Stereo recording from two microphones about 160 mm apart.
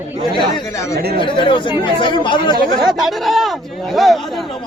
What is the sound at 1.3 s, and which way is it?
Speech, 30° left (ahead or behind).